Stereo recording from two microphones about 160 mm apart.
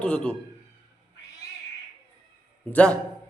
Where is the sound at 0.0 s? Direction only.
5° left (ahead or behind).